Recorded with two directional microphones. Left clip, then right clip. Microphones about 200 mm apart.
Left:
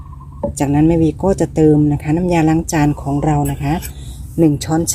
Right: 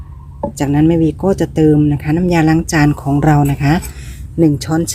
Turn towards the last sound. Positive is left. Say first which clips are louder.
# right 1 dB
turn(degrees=-5)  # may be behind; listen again after turning